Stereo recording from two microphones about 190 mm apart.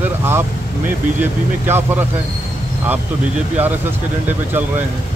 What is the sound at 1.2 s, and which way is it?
Speech, 10° right (ahead or behind).